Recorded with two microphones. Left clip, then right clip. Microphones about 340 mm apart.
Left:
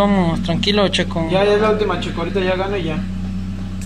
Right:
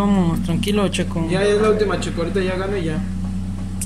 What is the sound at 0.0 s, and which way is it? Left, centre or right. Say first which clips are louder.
Speech: left 4 dB; centre.